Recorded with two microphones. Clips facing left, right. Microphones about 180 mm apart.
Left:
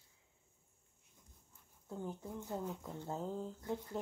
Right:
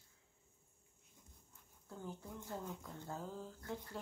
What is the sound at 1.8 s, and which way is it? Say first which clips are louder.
Speech: left 5 dB; 20° left (ahead or behind).